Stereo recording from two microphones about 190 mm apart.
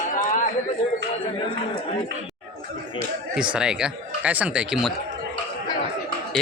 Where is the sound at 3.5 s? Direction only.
5° right (ahead or behind).